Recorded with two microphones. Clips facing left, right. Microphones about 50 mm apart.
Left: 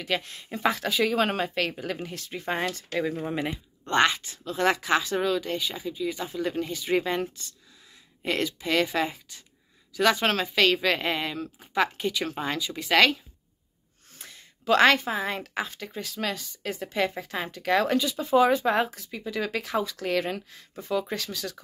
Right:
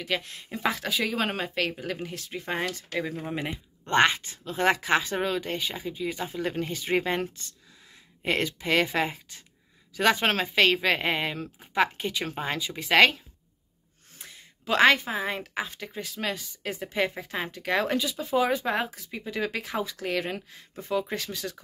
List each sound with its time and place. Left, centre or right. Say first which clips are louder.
0.0 s speech: left 1 dB; centre
3.8 s speech: right 1 dB; right
14.1 s speech: even; centre
18.1 s speech: left 6 dB; centre
19.0 s speech: even; centre